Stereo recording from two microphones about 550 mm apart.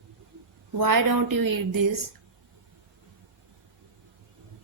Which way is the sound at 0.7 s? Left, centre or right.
Right.